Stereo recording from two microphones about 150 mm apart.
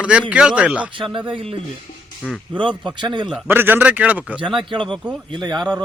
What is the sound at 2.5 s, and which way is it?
Speech, 30° right (ahead or behind).